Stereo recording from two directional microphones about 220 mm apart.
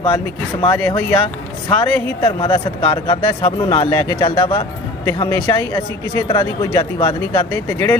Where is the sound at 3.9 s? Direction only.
10° left (ahead or behind).